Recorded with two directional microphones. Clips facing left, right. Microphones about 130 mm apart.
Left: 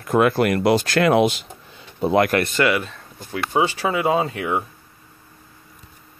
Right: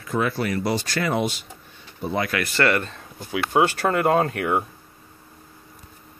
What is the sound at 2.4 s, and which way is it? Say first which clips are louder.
Speech: left 2 dB; 15° left (ahead or behind).